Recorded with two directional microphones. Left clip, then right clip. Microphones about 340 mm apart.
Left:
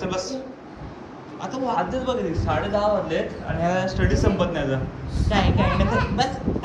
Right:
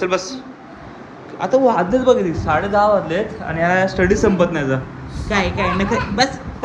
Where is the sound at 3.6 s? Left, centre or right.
Centre.